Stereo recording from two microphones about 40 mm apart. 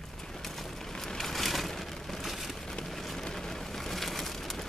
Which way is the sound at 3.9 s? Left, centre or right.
Centre.